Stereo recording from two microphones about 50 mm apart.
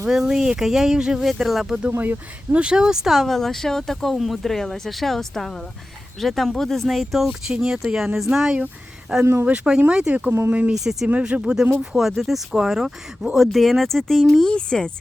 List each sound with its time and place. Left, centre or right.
0.1 s speech: centre
2.0 s speech: right
2.6 s speech: centre
9.2 s speech: right
9.5 s speech: centre
10.8 s speech: centre
11.2 s speech: centre
11.9 s speech: centre
14.5 s speech: centre